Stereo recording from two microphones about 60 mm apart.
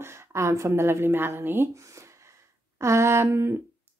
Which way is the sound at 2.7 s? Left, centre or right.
Right.